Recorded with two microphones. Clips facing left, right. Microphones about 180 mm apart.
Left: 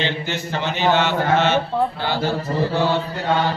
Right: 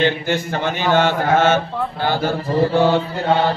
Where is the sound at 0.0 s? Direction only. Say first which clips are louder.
Right 6 dB; 50° right (ahead or behind).